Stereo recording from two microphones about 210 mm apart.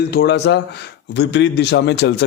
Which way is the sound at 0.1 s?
50° left (ahead or behind).